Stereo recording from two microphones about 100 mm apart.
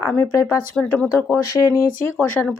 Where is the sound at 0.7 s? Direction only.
10° left (ahead or behind).